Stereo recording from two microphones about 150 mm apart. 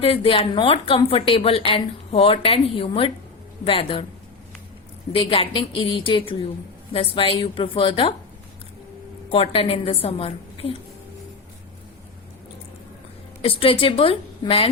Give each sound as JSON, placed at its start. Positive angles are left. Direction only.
{"t": 0.0, "sound": "a woman's voice", "side_deg": 40}
{"t": 5.1, "sound": "a woman's voice", "side_deg": 40}
{"t": 9.3, "sound": "a woman's voice", "side_deg": 40}
{"t": 13.4, "sound": "a woman's voice", "side_deg": 35}